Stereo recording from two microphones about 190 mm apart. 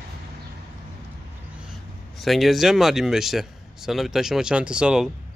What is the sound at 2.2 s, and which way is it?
Speech, centre (ahead or behind).